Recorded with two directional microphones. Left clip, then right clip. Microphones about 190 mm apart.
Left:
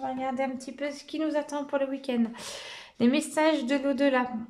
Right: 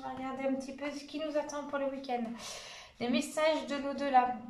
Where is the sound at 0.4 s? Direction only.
50° left (ahead or behind).